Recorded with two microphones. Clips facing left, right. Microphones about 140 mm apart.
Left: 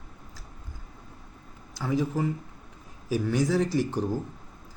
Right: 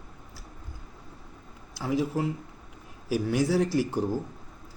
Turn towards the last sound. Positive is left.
turn(degrees=-10)  # may be behind; listen again after turning